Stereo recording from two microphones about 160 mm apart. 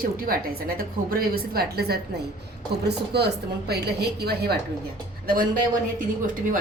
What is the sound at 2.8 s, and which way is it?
A woman's voice, 90° right.